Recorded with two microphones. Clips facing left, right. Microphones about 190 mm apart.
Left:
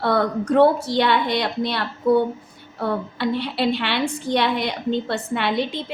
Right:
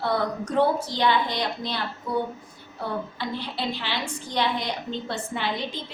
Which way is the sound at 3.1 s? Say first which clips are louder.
Left 8 dB; 70° left (ahead or behind).